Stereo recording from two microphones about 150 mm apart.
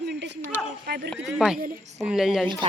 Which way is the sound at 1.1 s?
Centre (ahead or behind).